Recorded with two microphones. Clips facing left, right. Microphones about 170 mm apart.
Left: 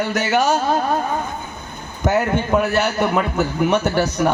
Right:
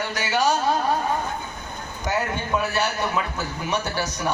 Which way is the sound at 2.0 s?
50° left (ahead or behind).